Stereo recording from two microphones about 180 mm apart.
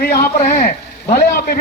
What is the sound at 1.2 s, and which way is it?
Speech, 60° left (ahead or behind).